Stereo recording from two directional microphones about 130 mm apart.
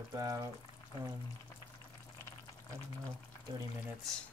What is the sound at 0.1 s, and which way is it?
Speech, 25° right (ahead or behind).